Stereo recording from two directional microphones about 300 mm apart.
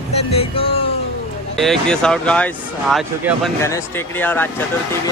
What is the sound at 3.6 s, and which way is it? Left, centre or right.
Speech, centre.